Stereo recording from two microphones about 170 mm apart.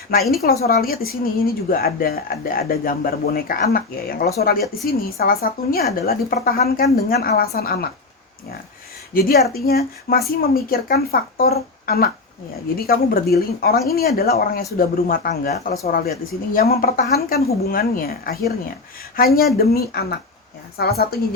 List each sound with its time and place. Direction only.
0.4 s a woman's voice: 60° left (ahead or behind)
9.1 s a woman's voice: 60° left (ahead or behind)